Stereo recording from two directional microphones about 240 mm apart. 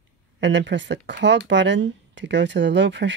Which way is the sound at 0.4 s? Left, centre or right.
Right.